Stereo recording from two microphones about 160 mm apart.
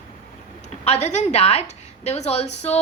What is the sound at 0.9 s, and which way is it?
A woman's voice, 45° left (ahead or behind).